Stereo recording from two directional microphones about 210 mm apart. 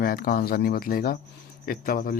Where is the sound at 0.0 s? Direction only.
45° left (ahead or behind).